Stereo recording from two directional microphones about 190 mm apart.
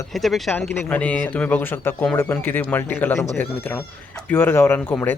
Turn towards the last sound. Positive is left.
turn(degrees=10)  # may be behind; listen again after turning